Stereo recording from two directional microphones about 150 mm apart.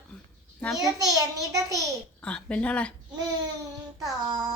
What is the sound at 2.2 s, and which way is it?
Speech, 10° left (ahead or behind).